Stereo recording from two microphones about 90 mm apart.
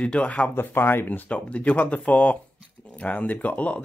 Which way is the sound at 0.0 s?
10° left (ahead or behind).